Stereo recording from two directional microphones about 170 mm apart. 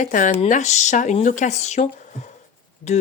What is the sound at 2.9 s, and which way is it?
Speech, 40° left (ahead or behind).